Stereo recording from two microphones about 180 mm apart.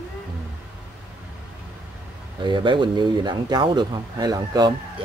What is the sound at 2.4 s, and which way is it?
Speech, 25° right (ahead or behind).